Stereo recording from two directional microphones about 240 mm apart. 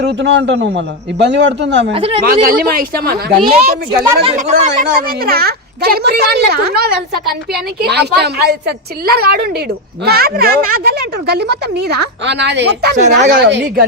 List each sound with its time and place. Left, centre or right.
0.0 s a man's voice: right
1.9 s speech: right
2.2 s speech: right
4.0 s a man's voice: right